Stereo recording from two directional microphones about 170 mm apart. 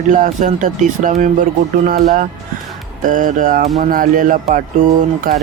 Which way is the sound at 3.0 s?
50° right (ahead or behind).